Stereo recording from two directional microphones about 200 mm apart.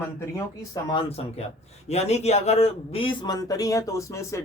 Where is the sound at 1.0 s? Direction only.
30° left (ahead or behind); by 4.4 s 15° left (ahead or behind).